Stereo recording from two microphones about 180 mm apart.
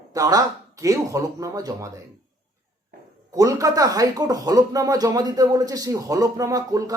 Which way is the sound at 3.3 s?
20° right (ahead or behind).